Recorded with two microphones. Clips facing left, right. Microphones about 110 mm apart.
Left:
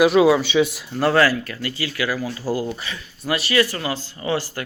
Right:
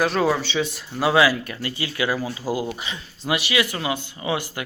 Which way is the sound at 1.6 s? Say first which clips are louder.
Right 1 dB; 25° right (ahead or behind).